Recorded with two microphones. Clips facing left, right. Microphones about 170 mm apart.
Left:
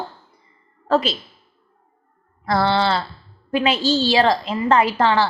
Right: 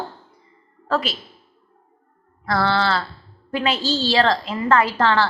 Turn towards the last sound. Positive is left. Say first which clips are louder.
# left 1 dB
turn(degrees=15)  # may be behind; listen again after turning